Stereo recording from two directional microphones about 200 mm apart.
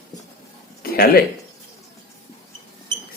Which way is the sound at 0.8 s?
50° left (ahead or behind).